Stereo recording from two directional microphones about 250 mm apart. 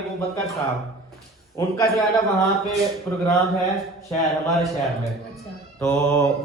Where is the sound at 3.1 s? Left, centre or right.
Centre.